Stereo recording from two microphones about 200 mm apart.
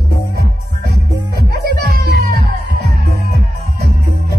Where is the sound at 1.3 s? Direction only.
50° right (ahead or behind).